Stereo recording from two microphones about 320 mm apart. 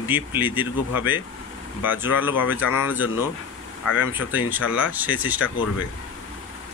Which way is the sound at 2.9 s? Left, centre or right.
Centre.